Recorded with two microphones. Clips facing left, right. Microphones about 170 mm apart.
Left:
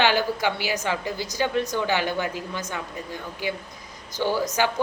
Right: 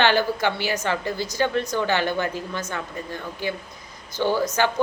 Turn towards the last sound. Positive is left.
turn(degrees=10)  # may be behind; listen again after turning